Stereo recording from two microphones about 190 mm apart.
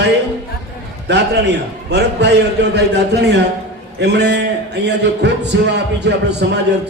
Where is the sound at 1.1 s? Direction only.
65° right (ahead or behind).